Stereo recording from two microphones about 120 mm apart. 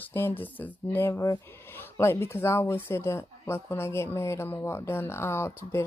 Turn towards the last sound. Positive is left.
turn(degrees=20)  # may be behind; listen again after turning